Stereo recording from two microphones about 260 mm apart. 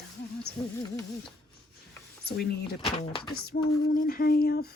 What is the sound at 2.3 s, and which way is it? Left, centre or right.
Speech, left.